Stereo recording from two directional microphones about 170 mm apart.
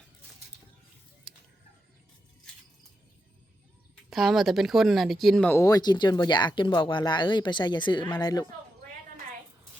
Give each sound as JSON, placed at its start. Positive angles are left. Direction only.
{"t": 4.1, "sound": "a woman's voice", "side_deg": 0}
{"t": 5.5, "sound": "speech", "side_deg": 20}